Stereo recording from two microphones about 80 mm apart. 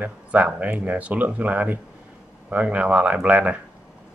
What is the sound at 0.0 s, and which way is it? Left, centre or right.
Speech, centre.